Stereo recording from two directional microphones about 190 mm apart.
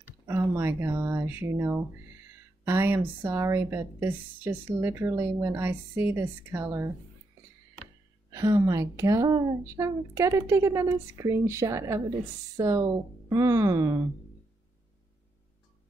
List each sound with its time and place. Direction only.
0.3 s a woman's voice: 10° right (ahead or behind)
8.3 s a woman's voice: 15° right (ahead or behind)